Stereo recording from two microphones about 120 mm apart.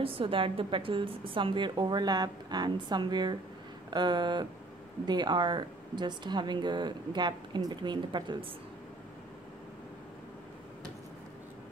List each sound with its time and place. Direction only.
0.0 s a woman's voice: 50° right (ahead or behind)